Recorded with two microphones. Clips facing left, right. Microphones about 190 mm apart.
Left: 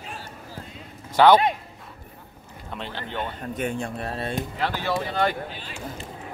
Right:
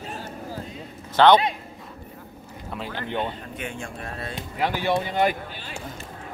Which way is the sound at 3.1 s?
20° right (ahead or behind).